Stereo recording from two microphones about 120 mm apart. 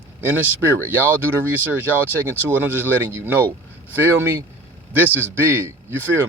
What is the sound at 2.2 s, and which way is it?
Speech, 15° right (ahead or behind).